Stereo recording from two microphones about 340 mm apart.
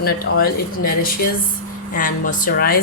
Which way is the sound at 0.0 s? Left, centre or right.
Left.